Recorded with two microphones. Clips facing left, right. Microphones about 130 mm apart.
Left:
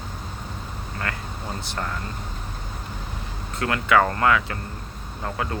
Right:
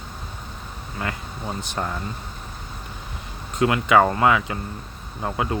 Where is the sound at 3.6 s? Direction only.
20° right (ahead or behind).